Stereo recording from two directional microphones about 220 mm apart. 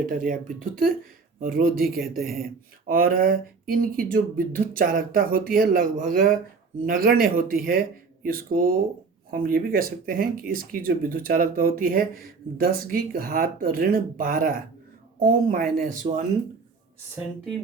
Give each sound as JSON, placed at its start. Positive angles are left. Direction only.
{"t": 0.0, "sound": "speech", "side_deg": -35}
{"t": 1.4, "sound": "speech", "side_deg": -40}